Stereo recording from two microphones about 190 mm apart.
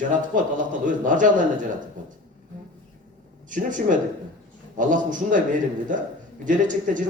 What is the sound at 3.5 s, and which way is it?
Speech, 45° right (ahead or behind).